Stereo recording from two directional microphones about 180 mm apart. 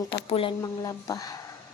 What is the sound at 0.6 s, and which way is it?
Speech, 20° left (ahead or behind).